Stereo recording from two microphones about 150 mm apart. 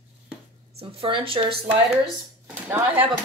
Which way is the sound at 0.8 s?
35° right (ahead or behind).